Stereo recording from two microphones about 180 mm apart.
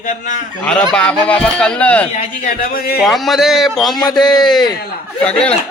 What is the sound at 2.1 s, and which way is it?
Speech, 50° left (ahead or behind).